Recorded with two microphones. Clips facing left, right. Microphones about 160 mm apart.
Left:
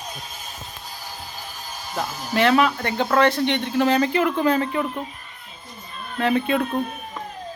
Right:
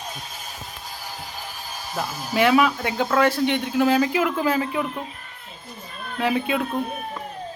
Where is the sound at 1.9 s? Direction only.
5° right (ahead or behind).